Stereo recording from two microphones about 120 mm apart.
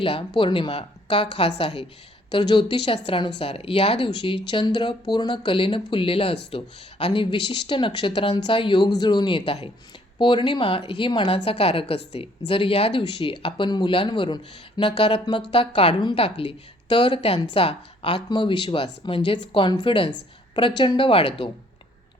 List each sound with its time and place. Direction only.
0.0 s speech: 45° left (ahead or behind)